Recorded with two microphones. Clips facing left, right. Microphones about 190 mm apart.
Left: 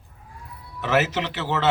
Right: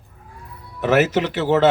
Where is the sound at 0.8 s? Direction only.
45° right (ahead or behind).